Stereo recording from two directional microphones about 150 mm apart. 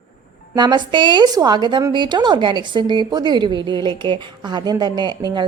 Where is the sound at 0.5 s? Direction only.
30° right (ahead or behind).